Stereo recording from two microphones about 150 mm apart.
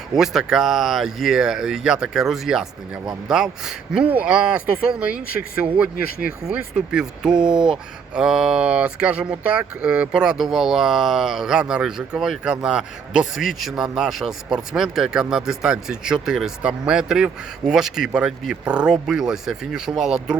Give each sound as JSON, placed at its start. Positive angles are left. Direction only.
{"t": 0.2, "sound": "speech", "side_deg": 0}
{"t": 6.0, "sound": "speech", "side_deg": 80}
{"t": 6.7, "sound": "speech", "side_deg": -5}